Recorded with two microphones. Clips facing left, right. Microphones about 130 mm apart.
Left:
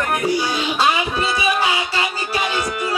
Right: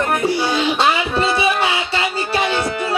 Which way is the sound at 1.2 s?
30° right (ahead or behind).